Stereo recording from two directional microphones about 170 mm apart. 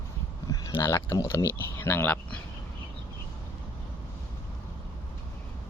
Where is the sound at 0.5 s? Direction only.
20° left (ahead or behind).